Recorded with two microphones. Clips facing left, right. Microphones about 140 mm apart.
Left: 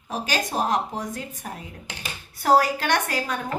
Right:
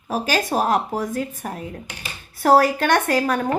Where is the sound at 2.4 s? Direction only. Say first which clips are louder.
Right 4 dB; 50° right (ahead or behind).